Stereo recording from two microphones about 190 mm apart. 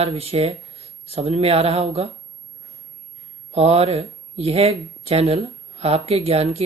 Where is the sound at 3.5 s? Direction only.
30° right (ahead or behind).